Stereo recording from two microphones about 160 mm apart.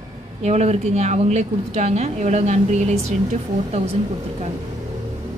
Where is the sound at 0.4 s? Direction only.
45° right (ahead or behind).